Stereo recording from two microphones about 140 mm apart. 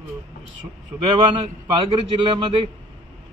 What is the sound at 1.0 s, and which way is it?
A man's voice, 35° right (ahead or behind).